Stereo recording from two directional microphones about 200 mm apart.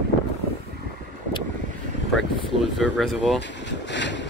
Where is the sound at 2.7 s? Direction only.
Centre (ahead or behind).